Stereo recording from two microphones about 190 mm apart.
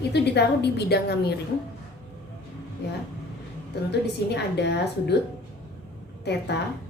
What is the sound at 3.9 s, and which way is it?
Speech, 60° left (ahead or behind).